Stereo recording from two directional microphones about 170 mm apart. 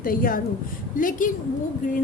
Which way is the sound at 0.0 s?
55° left (ahead or behind).